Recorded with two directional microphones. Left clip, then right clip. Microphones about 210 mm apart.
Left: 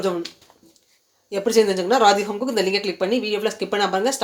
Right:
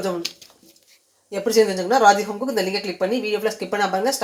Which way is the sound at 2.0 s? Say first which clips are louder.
Right 1 dB; centre (ahead or behind).